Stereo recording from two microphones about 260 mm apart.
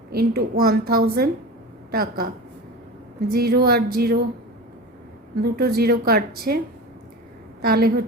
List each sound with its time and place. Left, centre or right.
0.1 s a woman's voice: right
5.4 s a woman's voice: right
7.6 s a woman's voice: right